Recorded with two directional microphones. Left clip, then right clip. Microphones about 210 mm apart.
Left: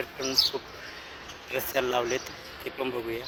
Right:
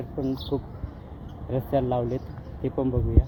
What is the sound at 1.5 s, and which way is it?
Speech, 25° left (ahead or behind).